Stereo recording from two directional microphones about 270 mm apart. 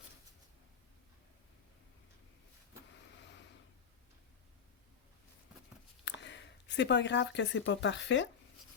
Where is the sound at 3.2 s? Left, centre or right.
Left.